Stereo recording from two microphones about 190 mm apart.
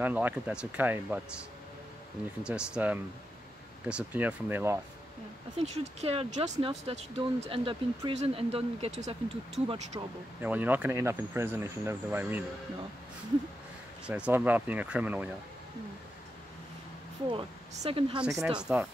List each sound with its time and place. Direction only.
0.0 s speech: 10° right (ahead or behind)
2.4 s speech: 5° right (ahead or behind)
5.6 s speech: 35° right (ahead or behind)
9.9 s speech: 20° right (ahead or behind)
10.4 s speech: 10° right (ahead or behind)
14.0 s speech: 5° right (ahead or behind)
17.3 s speech: 30° right (ahead or behind)
18.4 s speech: 5° right (ahead or behind)